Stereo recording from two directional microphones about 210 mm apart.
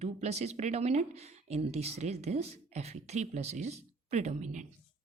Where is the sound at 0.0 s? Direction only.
30° right (ahead or behind).